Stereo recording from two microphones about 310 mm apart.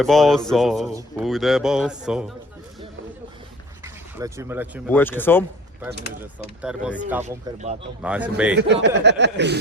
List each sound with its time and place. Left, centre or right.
0.0 s speech: centre
4.2 s speech: centre
4.9 s speech: centre
6.6 s speech: centre
7.3 s speech: right
8.0 s speech: centre
8.5 s speech: right